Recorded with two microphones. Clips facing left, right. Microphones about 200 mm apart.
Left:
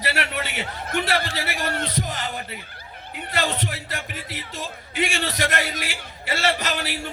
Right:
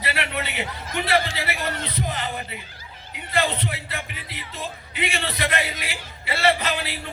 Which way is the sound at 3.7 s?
45° left (ahead or behind).